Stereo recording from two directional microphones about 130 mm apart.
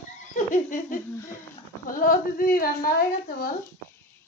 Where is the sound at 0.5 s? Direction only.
90° left.